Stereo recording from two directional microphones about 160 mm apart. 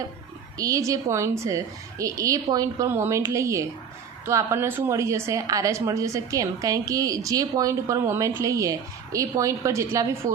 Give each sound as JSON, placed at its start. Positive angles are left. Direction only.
{"t": 0.6, "sound": "a woman's voice", "side_deg": -20}